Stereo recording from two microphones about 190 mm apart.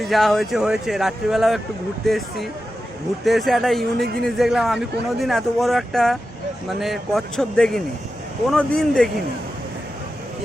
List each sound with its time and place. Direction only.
0.0 s speech: centre (ahead or behind)
3.9 s a man's voice: 55° right (ahead or behind)
4.2 s speech: centre (ahead or behind)